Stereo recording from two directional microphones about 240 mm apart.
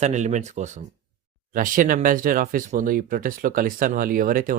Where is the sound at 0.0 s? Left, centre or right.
Right.